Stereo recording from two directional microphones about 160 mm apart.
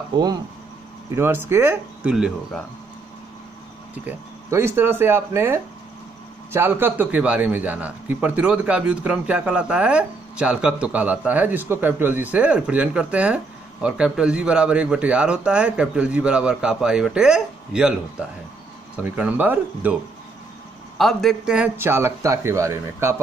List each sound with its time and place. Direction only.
0.1 s speech: 25° right (ahead or behind)
1.1 s a man's voice: 15° right (ahead or behind)
2.1 s a man's voice: 5° right (ahead or behind)
3.9 s a man's voice: 15° right (ahead or behind)
19.0 s a man's voice: 10° right (ahead or behind)
21.0 s a man's voice: centre (ahead or behind); by 23.2 s 15° right (ahead or behind)